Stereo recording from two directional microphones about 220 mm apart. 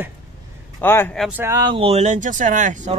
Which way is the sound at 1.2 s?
10° right (ahead or behind).